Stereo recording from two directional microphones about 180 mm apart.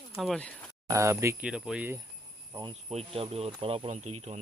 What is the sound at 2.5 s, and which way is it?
Rub, 25° right (ahead or behind).